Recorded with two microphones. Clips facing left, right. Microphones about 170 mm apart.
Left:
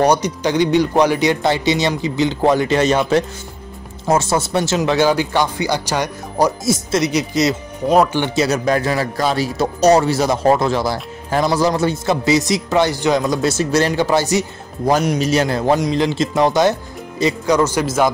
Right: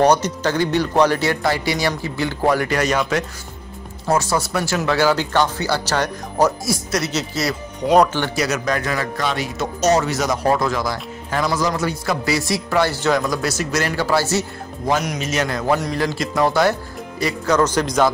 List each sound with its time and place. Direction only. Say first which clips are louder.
0.0 s speech: left 1 dB; 10° left (ahead or behind)
6.6 s speech: left 5 dB; 25° left (ahead or behind)
7.8 s speech: even; centre (ahead or behind)
8.4 s speech: left 6 dB; 30° left (ahead or behind)
14.9 s a man's voice: left 5 dB; 35° left (ahead or behind)
15.8 s speech: left 5 dB; 20° left (ahead or behind)
17.6 s speech: left 1 dB; 10° left (ahead or behind)